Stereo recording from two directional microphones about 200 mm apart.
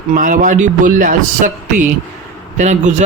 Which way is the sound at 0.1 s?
40° right (ahead or behind).